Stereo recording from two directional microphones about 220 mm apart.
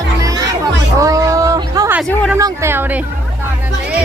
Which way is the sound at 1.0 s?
15° right (ahead or behind).